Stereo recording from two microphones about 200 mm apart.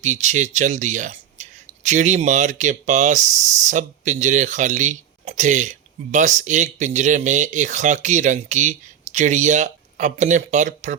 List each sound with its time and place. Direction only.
0.0 s speech: 35° right (ahead or behind)